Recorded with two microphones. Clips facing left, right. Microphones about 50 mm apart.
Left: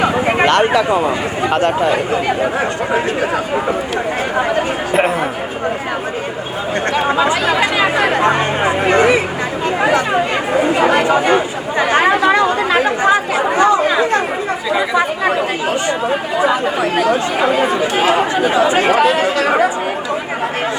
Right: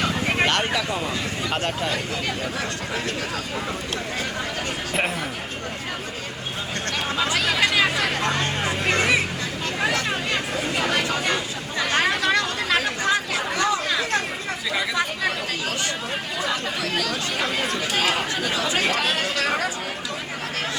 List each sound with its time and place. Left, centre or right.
0.0 s speech: left
4.4 s chatter: left
6.9 s chatter: left
15.9 s speech: left